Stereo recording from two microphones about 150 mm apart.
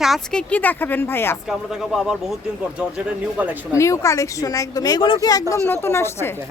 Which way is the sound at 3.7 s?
20° left (ahead or behind).